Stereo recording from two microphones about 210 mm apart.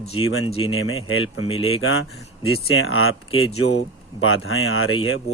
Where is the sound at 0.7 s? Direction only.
75° left (ahead or behind).